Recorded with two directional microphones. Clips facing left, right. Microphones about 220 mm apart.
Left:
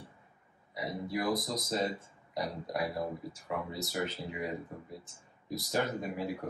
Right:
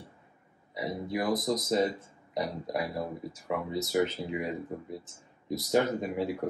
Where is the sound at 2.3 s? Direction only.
20° right (ahead or behind).